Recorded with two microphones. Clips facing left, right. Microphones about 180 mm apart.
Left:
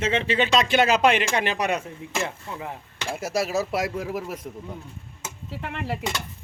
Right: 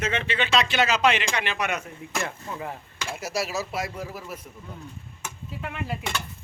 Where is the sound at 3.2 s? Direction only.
50° left (ahead or behind); by 4.4 s 75° left (ahead or behind).